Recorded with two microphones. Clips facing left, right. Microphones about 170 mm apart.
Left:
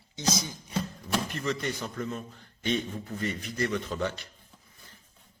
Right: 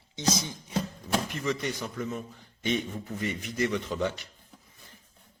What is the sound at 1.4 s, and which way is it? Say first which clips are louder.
Speech: right 1 dB; 10° right (ahead or behind).